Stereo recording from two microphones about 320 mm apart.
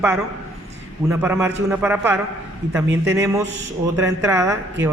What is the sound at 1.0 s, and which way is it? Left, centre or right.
A man's voice, centre.